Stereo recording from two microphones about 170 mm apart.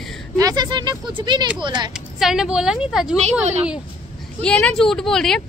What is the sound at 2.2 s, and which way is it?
Speech, 5° right (ahead or behind).